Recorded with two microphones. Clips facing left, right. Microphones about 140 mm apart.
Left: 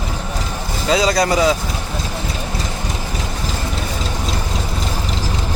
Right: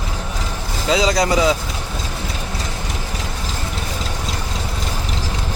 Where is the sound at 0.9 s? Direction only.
20° right (ahead or behind).